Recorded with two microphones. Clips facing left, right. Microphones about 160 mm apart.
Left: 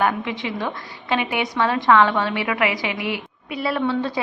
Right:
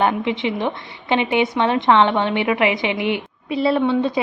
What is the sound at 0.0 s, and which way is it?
A woman's voice, 25° right (ahead or behind).